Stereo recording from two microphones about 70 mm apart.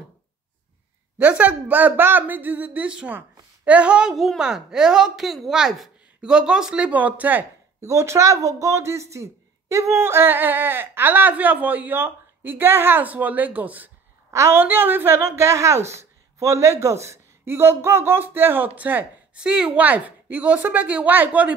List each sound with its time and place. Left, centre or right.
1.1 s a woman's voice: centre
4.1 s a woman's voice: centre; by 7.4 s right
7.8 s speech: right
14.3 s a woman's voice: right
14.6 s a woman's voice: right